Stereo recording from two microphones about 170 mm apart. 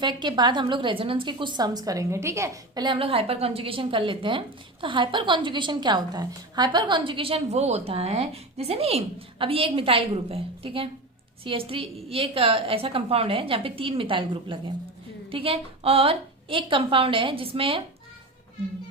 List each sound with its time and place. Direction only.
0.0 s a woman's voice: 25° right (ahead or behind)